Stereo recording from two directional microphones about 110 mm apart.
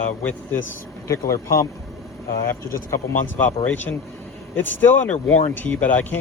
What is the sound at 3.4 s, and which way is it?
Speech, 15° left (ahead or behind).